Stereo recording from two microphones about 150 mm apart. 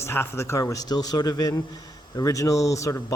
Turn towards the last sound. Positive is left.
turn(degrees=20)  # may be behind; listen again after turning